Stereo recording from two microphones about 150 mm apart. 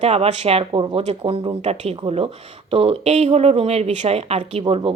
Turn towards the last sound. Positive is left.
turn(degrees=-35)  # may be behind; listen again after turning